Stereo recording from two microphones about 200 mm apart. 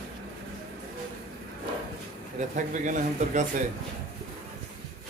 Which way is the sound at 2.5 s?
40° right (ahead or behind).